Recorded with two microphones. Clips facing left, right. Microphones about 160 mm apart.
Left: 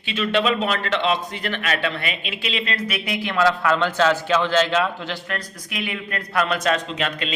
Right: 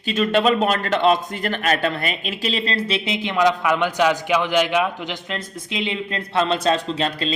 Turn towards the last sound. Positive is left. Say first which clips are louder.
# right 3 dB
turn(degrees=-35)  # may be behind; listen again after turning